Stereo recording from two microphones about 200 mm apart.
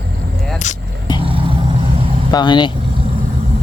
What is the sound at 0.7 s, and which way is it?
Vehicle, 35° left (ahead or behind).